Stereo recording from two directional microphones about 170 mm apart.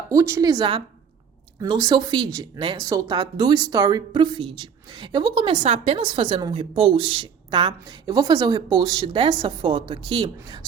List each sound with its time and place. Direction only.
0.1 s speech: 15° right (ahead or behind)